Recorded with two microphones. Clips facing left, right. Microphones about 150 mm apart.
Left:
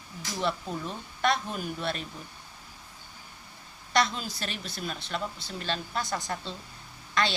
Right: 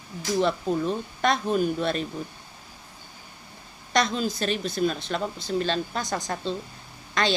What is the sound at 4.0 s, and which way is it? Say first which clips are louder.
Speech: right 4 dB; 20° right (ahead or behind).